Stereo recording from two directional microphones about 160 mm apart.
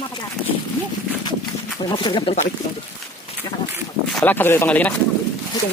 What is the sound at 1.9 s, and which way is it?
Speech, 30° left (ahead or behind).